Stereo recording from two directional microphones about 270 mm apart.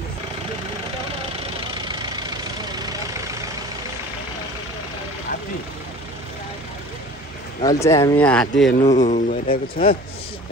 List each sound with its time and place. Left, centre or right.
1.9 s vehicle: centre
7.6 s speech: centre
8.7 s a man's voice: left